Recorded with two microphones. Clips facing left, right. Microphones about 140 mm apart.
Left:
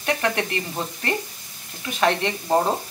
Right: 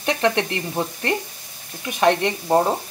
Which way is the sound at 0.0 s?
20° right (ahead or behind).